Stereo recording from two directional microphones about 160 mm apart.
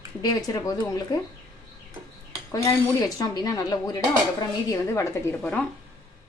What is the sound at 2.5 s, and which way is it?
A woman's voice, 20° left (ahead or behind).